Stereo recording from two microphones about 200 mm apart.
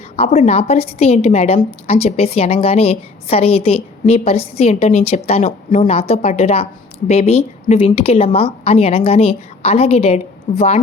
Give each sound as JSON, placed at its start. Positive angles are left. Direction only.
{"t": 0.2, "sound": "a woman's voice", "side_deg": 35}